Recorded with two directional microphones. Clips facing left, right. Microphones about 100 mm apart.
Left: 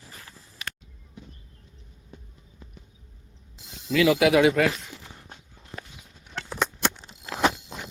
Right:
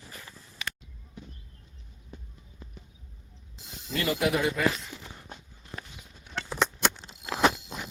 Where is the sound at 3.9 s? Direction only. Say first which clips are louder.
Left 8 dB; 90° left; by 4.7 s 70° left (ahead or behind).